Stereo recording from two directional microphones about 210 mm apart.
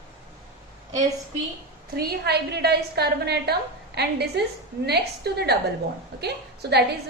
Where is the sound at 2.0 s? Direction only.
50° right (ahead or behind).